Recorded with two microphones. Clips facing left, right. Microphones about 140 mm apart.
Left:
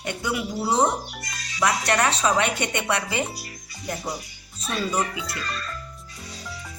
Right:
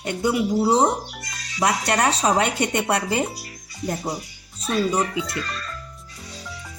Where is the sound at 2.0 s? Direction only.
40° right (ahead or behind).